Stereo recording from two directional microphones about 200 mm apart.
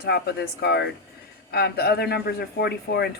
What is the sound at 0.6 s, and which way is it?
Speech, 55° left (ahead or behind).